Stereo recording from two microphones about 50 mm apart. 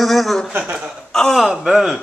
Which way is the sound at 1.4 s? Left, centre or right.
Centre.